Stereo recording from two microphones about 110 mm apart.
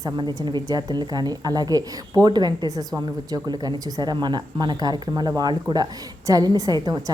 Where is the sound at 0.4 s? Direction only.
40° right (ahead or behind).